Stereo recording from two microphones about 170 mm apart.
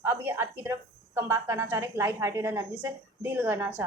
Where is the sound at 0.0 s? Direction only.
15° right (ahead or behind).